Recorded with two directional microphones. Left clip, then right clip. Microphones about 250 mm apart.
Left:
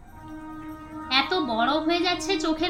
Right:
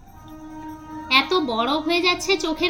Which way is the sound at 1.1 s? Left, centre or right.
Centre.